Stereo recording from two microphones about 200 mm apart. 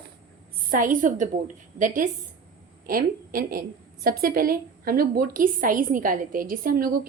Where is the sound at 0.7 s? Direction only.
45° right (ahead or behind).